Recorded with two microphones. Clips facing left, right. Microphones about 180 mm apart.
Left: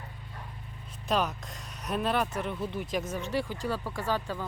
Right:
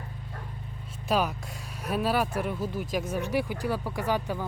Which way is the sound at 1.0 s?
5° right (ahead or behind).